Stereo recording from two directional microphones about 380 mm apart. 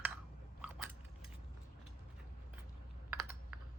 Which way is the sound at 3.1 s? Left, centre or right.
Centre.